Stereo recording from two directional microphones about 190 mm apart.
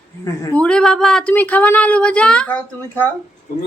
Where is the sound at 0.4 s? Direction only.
5° left (ahead or behind).